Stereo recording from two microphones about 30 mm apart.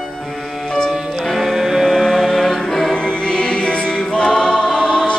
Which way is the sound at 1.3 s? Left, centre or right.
Centre.